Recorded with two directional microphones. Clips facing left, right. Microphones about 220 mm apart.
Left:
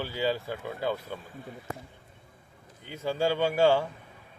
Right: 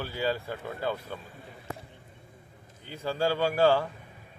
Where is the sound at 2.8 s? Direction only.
15° left (ahead or behind).